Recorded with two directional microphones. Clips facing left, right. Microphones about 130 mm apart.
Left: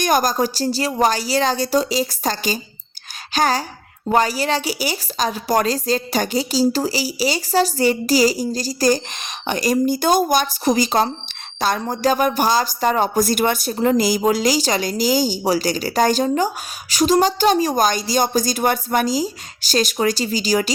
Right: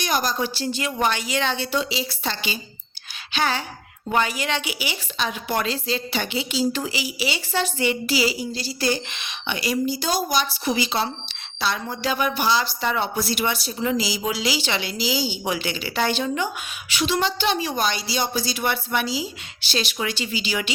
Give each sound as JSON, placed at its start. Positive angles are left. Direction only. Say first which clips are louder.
{"t": 0.0, "sound": "a woman's voice", "louder": "left 6 dB", "side_deg": 45}